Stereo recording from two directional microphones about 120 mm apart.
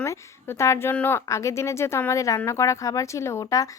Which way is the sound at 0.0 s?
25° left (ahead or behind).